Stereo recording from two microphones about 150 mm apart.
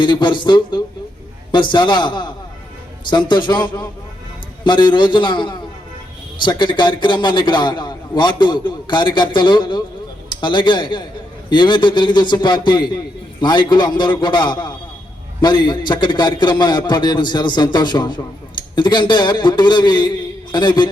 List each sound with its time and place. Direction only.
0.0 s a man's voice: 30° left (ahead or behind)